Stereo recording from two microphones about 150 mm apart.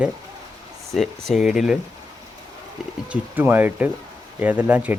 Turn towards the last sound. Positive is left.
turn(degrees=-10)  # may be behind; listen again after turning